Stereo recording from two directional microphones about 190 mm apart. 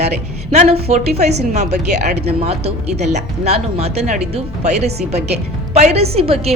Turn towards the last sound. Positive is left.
turn(degrees=-30)  # may be behind; listen again after turning